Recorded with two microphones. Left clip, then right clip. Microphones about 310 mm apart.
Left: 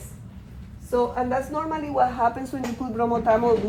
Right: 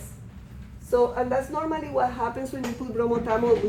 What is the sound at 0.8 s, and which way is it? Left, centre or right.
Speech, centre.